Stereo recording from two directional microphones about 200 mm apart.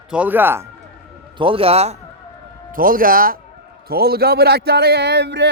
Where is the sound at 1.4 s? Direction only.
25° right (ahead or behind).